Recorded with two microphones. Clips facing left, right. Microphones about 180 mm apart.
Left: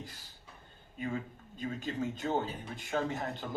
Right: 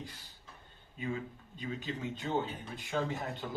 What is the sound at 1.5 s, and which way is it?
Speech, 45° left (ahead or behind).